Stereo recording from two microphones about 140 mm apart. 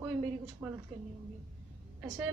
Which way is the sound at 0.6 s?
10° right (ahead or behind).